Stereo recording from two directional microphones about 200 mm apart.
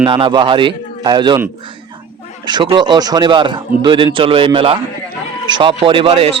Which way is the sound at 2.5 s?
20° right (ahead or behind).